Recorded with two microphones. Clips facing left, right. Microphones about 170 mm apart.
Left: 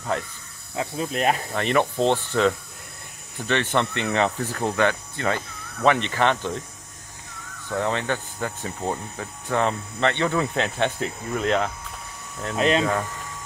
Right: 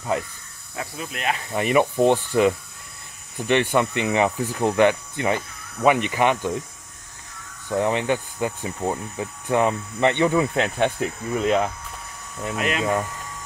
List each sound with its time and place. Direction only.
0.7 s speech: 35° left (ahead or behind)
1.5 s speech: 10° right (ahead or behind)
7.7 s speech: 15° right (ahead or behind)
12.5 s speech: 30° left (ahead or behind)